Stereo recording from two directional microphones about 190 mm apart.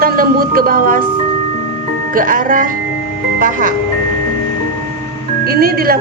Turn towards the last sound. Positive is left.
turn(degrees=-50)  # may be behind; listen again after turning